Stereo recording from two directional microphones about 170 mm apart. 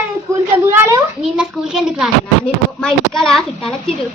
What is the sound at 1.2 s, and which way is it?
A child's voice, 5° right (ahead or behind).